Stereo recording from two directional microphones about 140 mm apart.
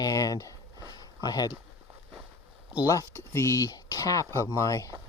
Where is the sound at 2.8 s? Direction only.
20° left (ahead or behind).